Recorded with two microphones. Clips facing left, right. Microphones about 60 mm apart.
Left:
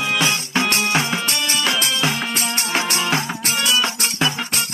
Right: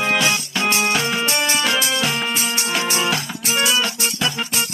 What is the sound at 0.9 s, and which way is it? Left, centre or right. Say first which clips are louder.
Music: even; left.